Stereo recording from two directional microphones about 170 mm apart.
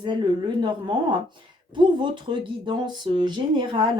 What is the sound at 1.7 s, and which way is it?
A woman's voice, 30° right (ahead or behind).